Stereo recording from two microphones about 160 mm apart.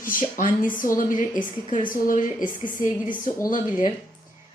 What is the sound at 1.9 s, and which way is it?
Speech, 55° left (ahead or behind).